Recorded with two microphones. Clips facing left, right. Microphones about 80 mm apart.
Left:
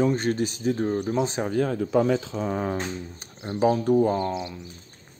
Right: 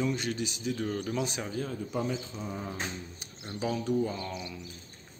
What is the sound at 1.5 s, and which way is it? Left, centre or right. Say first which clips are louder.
Speech: left 11 dB; left.